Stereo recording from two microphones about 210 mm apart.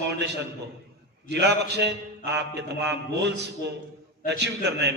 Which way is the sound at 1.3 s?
55° right (ahead or behind).